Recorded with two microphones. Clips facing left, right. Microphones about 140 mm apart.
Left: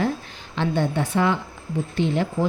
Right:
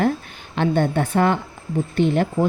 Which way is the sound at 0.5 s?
50° right (ahead or behind).